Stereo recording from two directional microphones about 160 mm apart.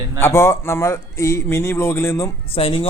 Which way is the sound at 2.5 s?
35° left (ahead or behind).